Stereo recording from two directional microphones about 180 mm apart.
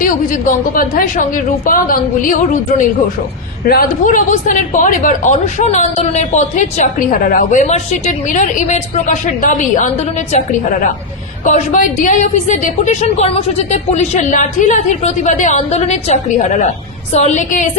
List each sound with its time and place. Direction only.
0.0 s a woman's voice: 50° left (ahead or behind)